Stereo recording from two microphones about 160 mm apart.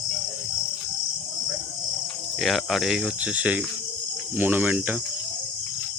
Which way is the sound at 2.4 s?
Centre (ahead or behind).